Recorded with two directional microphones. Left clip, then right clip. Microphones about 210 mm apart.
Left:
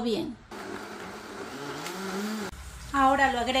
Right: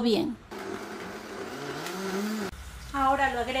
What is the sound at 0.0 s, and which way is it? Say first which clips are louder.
Speech: right 4 dB; 25° right (ahead or behind).